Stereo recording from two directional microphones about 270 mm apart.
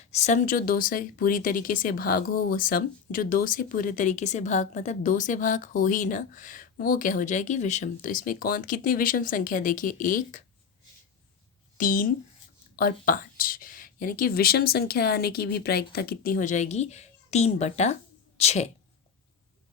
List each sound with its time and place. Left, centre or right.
0.1 s speech: left
11.8 s a woman's voice: left